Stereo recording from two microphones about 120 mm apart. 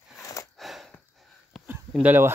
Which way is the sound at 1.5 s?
Centre (ahead or behind).